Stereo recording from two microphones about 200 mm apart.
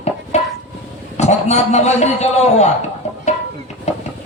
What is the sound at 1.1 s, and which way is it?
A man's voice, 35° left (ahead or behind).